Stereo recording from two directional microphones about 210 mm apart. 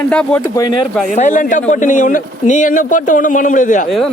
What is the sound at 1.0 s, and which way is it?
A man's voice, 35° left (ahead or behind).